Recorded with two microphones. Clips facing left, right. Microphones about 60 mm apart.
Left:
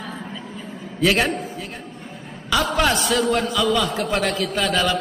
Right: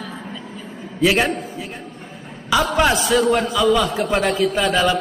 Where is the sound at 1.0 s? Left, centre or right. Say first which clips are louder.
Right 2 dB; centre.